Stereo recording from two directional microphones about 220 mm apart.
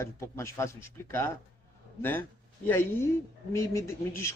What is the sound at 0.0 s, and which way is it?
Speech, 10° left (ahead or behind).